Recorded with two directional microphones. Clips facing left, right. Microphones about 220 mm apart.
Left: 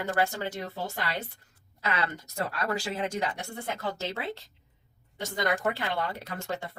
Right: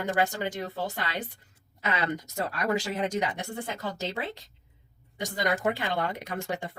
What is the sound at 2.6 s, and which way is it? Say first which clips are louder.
Speech: right 4 dB; 15° right (ahead or behind).